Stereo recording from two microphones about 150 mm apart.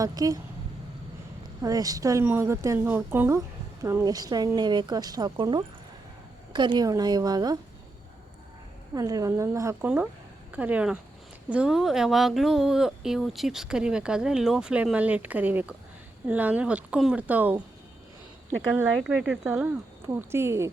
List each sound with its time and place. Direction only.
0.0 s a woman's voice: 25° right (ahead or behind)
1.6 s a woman's voice: 25° right (ahead or behind)
9.0 s a woman's voice: 25° right (ahead or behind)
18.9 s speech: 5° right (ahead or behind)